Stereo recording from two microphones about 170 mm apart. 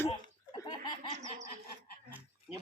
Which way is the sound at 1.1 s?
45° right (ahead or behind).